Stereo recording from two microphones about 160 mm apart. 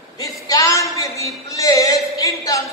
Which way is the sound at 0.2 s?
20° left (ahead or behind).